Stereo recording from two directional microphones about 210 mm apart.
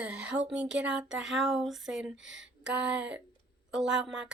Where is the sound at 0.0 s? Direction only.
5° right (ahead or behind).